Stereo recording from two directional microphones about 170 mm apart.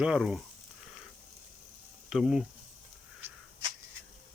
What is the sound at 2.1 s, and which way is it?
Speech, 5° right (ahead or behind).